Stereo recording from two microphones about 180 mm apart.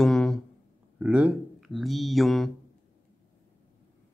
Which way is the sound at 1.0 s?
5° right (ahead or behind).